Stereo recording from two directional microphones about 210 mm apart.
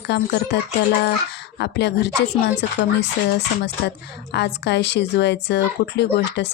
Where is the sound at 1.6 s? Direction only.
55° left (ahead or behind).